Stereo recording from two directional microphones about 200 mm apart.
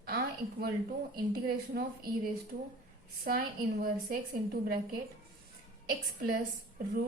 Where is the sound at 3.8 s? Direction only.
45° right (ahead or behind).